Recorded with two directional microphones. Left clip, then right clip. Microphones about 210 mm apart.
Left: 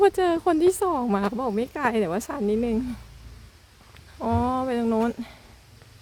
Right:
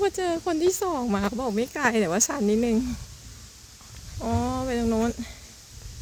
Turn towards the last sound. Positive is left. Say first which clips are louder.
# left 1 dB
turn(degrees=10)  # may be behind; listen again after turning